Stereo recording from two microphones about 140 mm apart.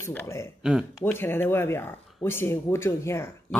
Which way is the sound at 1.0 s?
15° left (ahead or behind).